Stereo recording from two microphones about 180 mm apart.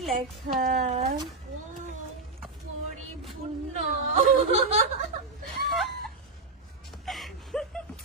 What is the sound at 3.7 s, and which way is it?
Whimper, 40° right (ahead or behind).